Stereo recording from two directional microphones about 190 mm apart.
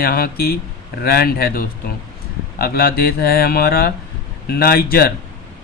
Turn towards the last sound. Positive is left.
turn(degrees=55)  # may be behind; listen again after turning